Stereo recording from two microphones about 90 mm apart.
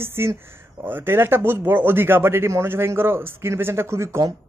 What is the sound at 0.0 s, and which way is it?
Speech, 30° right (ahead or behind).